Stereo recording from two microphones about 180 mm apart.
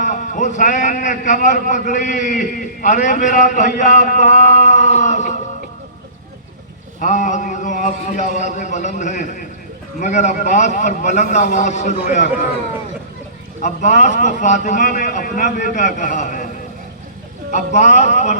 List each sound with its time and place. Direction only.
0.0 s a man's voice: 45° left (ahead or behind)
7.0 s a man's voice: 40° left (ahead or behind)
13.6 s a man's voice: 40° left (ahead or behind)
17.5 s a man's voice: 40° left (ahead or behind)